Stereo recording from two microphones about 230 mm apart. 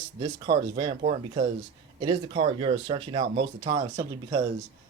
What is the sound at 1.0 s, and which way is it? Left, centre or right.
Speech, right.